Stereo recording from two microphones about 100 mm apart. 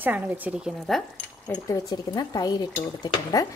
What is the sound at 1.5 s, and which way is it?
A woman's voice, 40° left (ahead or behind).